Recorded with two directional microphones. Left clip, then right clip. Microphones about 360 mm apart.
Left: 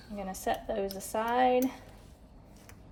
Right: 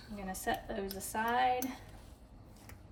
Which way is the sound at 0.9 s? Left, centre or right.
Centre.